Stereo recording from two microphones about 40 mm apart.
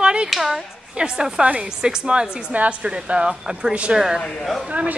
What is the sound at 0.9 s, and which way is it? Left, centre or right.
Speech, right.